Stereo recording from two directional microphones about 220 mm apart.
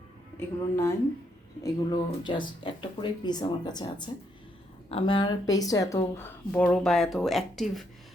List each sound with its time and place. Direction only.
0.3 s a woman's voice: 15° left (ahead or behind)